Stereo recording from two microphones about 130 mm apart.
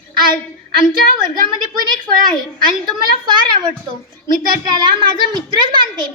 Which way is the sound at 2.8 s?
35° right (ahead or behind).